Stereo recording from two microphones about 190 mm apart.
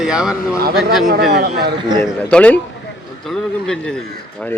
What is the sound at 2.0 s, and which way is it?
Speech, 5° left (ahead or behind).